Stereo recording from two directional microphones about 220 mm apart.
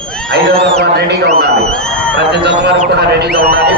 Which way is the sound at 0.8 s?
50° right (ahead or behind).